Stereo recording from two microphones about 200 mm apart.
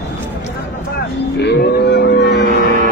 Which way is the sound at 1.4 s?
60° left (ahead or behind).